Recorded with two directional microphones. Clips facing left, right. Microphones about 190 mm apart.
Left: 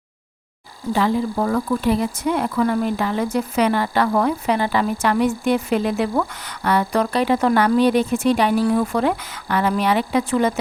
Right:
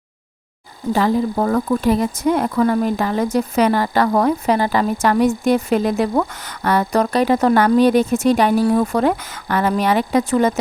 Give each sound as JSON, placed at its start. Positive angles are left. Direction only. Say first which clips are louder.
{"t": 0.9, "sound": "speech", "louder": "right 2 dB", "side_deg": -40}